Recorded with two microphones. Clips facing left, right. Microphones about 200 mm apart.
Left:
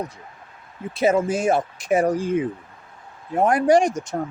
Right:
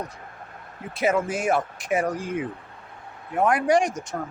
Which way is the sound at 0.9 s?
25° left (ahead or behind).